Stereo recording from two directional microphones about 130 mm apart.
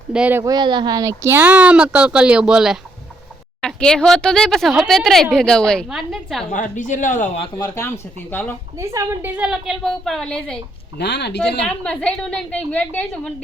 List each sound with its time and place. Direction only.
0.1 s speech: 10° right (ahead or behind)
0.4 s speech: 35° right (ahead or behind); by 2.7 s 5° right (ahead or behind)
3.6 s speech: 5° left (ahead or behind)
6.5 s speech: 75° left (ahead or behind)
7.6 s a woman's voice: 20° left (ahead or behind)
8.8 s a woman's voice: 20° right (ahead or behind)
9.3 s speech: 5° right (ahead or behind)
11.6 s a woman's voice: 10° left (ahead or behind)